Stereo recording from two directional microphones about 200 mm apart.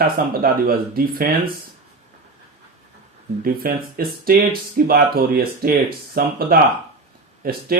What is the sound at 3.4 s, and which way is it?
Speech, 45° right (ahead or behind).